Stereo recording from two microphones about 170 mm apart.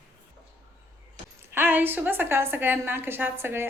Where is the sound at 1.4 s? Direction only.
10° right (ahead or behind).